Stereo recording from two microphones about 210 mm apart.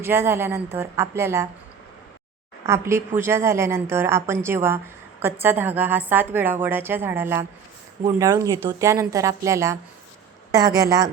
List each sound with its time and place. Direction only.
0.0 s a woman's voice: 10° right (ahead or behind)
2.6 s a woman's voice: 15° right (ahead or behind)